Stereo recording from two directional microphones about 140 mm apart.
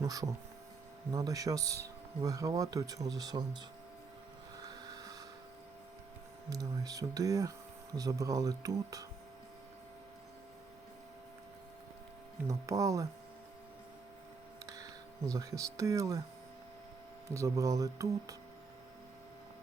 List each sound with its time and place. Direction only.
0.0 s speech: 25° right (ahead or behind)
4.6 s a sound: 25° right (ahead or behind)
6.5 s speech: 25° right (ahead or behind)
12.5 s speech: 25° right (ahead or behind)
15.3 s speech: 20° right (ahead or behind)
17.2 s speech: 20° right (ahead or behind)